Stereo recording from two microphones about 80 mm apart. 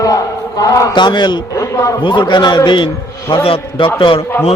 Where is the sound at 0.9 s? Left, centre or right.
Left.